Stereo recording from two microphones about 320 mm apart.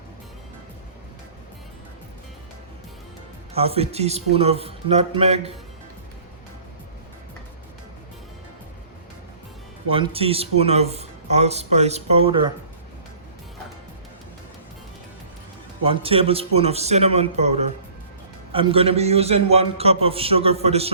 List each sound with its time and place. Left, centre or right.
3.5 s speech: centre
9.9 s a man's voice: centre
15.8 s a man's voice: centre